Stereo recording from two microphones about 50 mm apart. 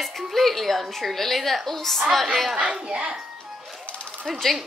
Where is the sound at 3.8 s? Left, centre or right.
Left.